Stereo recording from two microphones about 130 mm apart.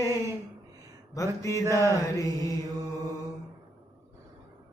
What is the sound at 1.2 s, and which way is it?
Mantra, 25° left (ahead or behind).